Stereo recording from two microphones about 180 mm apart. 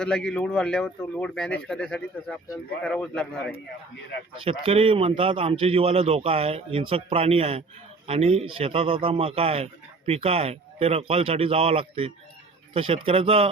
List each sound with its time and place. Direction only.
0.0 s speech: 5° left (ahead or behind)
4.4 s a man's voice: 35° right (ahead or behind)